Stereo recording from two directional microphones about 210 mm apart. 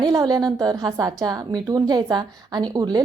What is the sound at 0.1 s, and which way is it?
A woman's voice, 15° right (ahead or behind).